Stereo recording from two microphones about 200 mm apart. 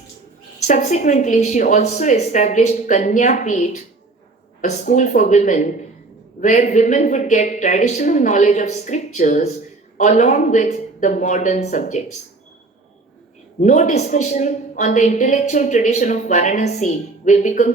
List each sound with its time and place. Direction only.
0.7 s a woman's voice: 35° left (ahead or behind)
13.6 s a woman's voice: 40° left (ahead or behind)